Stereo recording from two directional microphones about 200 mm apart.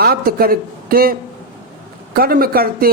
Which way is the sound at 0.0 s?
50° right (ahead or behind).